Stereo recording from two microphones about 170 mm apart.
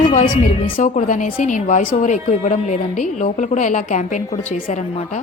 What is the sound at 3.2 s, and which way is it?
Speech, 45° left (ahead or behind).